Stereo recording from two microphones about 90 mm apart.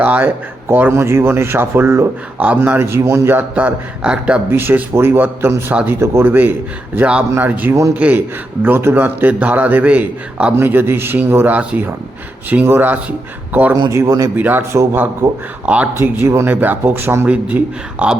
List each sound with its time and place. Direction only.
0.0 s speech: 20° right (ahead or behind)
4.5 s speech: 25° right (ahead or behind)
13.9 s speech: 35° right (ahead or behind)
14.3 s speech: 20° right (ahead or behind)
16.0 s speech: 30° right (ahead or behind)